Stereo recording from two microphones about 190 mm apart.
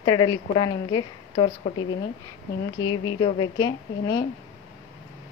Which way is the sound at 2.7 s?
90° left.